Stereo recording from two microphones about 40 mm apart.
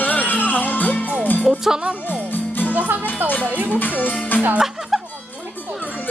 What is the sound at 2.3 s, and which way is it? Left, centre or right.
Music, left.